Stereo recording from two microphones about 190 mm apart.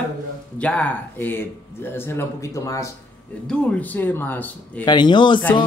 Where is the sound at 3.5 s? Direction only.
5° left (ahead or behind).